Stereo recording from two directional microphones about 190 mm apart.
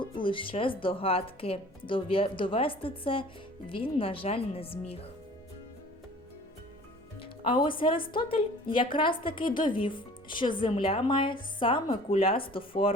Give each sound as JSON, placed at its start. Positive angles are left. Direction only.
{"t": 0.0, "sound": "speech", "side_deg": 25}
{"t": 7.2, "sound": "speech", "side_deg": 25}